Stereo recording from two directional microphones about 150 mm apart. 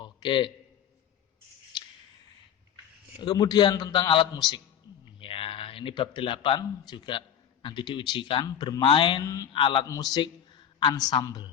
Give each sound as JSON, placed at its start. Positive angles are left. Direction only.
{"t": 0.0, "sound": "a sound", "side_deg": 30}
{"t": 3.2, "sound": "a man's voice", "side_deg": 30}
{"t": 9.2, "sound": "a man's voice", "side_deg": 20}
{"t": 9.5, "sound": "speech", "side_deg": 35}
{"t": 9.8, "sound": "a man's voice", "side_deg": 25}